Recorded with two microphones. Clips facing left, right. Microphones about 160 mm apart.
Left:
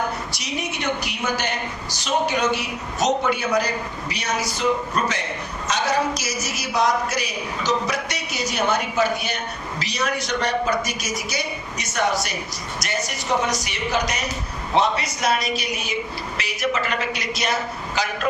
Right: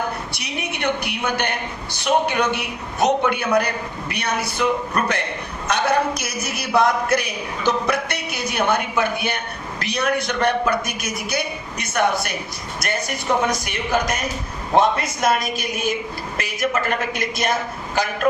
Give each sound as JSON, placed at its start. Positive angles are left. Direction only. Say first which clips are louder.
{"t": 0.3, "sound": "a man's voice", "louder": "even", "side_deg": -60}